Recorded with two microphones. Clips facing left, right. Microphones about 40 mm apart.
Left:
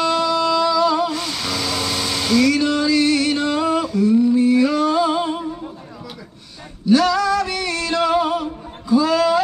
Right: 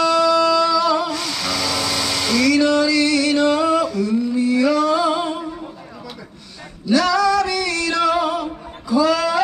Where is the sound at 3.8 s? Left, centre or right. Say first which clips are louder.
Left 3 dB; right.